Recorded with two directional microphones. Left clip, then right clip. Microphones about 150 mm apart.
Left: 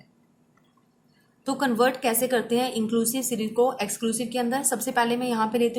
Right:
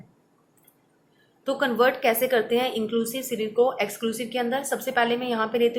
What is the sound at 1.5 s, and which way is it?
A woman's voice, 25° left (ahead or behind).